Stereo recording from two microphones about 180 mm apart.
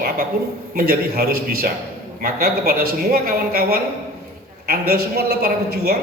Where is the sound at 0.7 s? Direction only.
60° right (ahead or behind).